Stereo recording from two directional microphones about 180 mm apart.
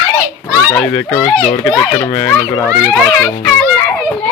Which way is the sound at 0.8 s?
15° left (ahead or behind).